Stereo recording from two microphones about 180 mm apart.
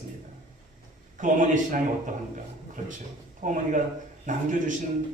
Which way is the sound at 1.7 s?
45° right (ahead or behind).